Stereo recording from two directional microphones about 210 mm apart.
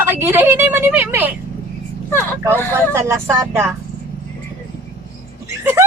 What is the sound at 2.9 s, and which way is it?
Speech, 15° right (ahead or behind).